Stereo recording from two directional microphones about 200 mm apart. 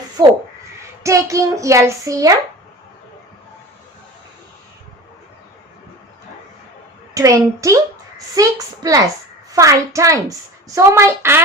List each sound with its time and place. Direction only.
1.0 s child singing: 15° right (ahead or behind)
7.1 s child singing: 15° right (ahead or behind)